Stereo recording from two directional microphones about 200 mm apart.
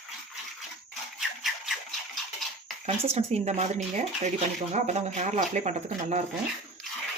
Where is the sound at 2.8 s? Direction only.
30° right (ahead or behind).